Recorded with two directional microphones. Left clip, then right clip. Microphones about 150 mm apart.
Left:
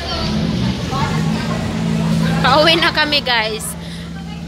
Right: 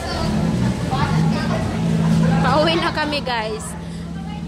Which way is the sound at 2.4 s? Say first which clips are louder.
Left 6 dB; centre (ahead or behind).